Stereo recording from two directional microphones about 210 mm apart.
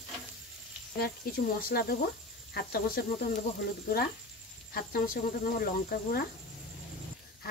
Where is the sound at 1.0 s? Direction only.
45° left (ahead or behind).